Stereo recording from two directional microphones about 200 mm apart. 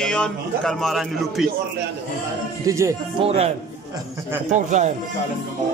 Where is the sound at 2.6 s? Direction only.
15° right (ahead or behind).